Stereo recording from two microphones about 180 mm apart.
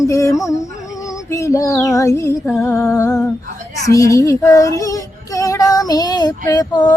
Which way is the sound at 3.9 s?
15° left (ahead or behind).